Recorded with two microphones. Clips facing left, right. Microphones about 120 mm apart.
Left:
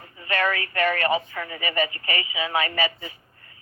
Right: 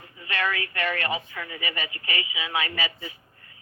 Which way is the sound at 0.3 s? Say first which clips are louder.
Left 4 dB; 50° left (ahead or behind).